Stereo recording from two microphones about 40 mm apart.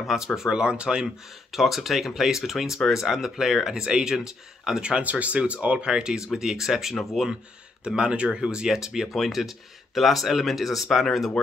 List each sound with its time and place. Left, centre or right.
0.0 s speech: centre
0.5 s speech: right
1.5 s speech: centre
5.0 s speech: right
5.9 s speech: centre
7.8 s speech: right; by 11.1 s centre
11.4 s speech: centre